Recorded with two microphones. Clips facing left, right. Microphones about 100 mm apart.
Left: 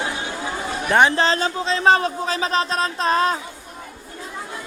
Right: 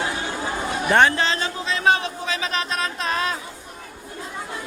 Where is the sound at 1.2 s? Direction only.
35° left (ahead or behind).